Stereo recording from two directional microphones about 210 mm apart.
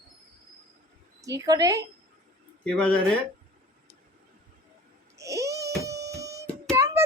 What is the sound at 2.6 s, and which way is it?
Speech, 5° left (ahead or behind).